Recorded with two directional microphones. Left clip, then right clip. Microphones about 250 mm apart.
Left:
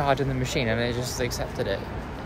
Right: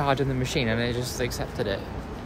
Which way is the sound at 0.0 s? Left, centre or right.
Centre.